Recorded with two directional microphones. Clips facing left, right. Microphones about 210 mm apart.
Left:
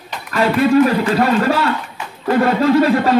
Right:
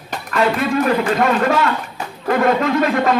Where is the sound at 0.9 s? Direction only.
35° left (ahead or behind).